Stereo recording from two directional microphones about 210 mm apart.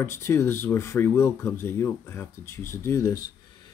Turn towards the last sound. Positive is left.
turn(degrees=15)  # may be behind; listen again after turning